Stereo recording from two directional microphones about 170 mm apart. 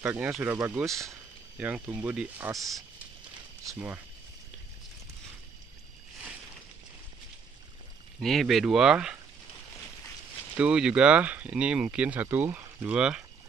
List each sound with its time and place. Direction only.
0.0 s speech: 10° right (ahead or behind)
3.6 s speech: 10° right (ahead or behind)
8.2 s speech: centre (ahead or behind)
10.6 s speech: 5° right (ahead or behind)